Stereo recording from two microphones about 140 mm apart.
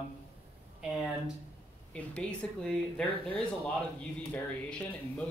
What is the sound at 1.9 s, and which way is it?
Speech, 5° left (ahead or behind).